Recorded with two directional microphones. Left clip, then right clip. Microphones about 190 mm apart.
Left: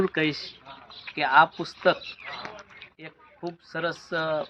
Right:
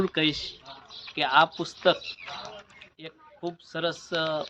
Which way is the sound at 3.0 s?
5° right (ahead or behind).